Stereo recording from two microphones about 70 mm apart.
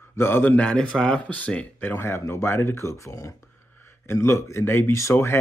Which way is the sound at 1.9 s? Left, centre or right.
Left.